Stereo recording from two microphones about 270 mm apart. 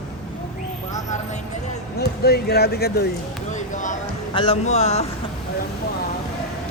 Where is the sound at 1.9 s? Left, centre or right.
Left.